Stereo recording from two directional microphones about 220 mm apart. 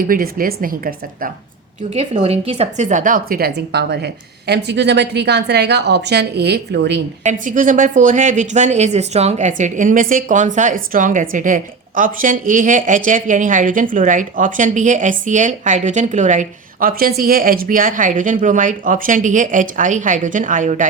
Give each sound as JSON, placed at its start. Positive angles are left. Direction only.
{"t": 0.0, "sound": "a woman's voice", "side_deg": -40}
{"t": 1.9, "sound": "a woman's voice", "side_deg": -30}
{"t": 7.3, "sound": "a woman's voice", "side_deg": -35}